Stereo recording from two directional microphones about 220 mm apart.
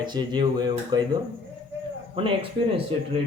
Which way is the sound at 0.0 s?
20° right (ahead or behind).